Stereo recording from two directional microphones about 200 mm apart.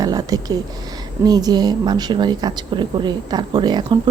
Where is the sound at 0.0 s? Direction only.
20° right (ahead or behind).